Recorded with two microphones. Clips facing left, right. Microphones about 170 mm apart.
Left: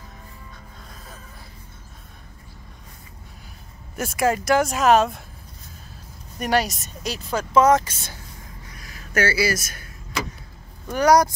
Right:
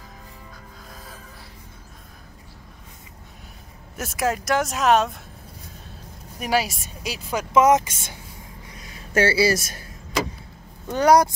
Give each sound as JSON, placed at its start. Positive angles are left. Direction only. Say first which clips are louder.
{"t": 3.9, "sound": "speech", "louder": "left 3 dB", "side_deg": 0}
{"t": 6.4, "sound": "speech", "louder": "left 1 dB", "side_deg": -5}
{"t": 8.7, "sound": "a sound", "louder": "right 3 dB", "side_deg": -25}
{"t": 10.9, "sound": "speech", "louder": "even", "side_deg": -25}